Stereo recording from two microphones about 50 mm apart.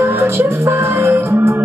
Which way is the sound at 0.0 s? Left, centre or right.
Right.